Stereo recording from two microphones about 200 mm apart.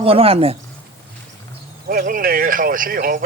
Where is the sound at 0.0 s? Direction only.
30° right (ahead or behind).